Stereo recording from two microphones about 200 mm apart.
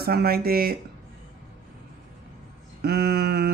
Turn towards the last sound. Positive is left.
turn(degrees=-55)  # may be behind; listen again after turning